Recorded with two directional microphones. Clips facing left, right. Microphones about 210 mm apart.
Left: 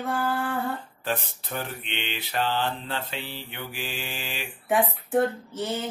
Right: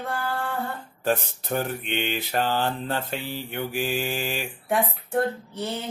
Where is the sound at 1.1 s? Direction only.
45° right (ahead or behind).